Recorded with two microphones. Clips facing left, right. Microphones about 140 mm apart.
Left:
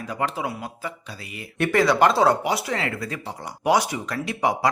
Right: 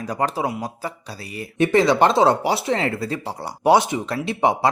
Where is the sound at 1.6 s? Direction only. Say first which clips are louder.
Right 3 dB; 20° right (ahead or behind).